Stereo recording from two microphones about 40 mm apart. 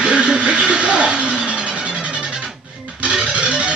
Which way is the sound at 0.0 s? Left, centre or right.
Right.